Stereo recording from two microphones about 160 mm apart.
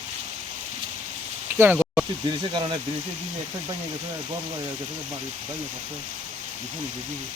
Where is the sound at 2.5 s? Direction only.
30° right (ahead or behind).